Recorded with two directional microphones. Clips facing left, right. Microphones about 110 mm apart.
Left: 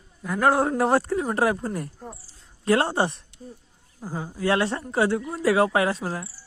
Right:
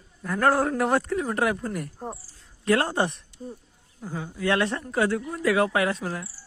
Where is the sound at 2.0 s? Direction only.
40° right (ahead or behind).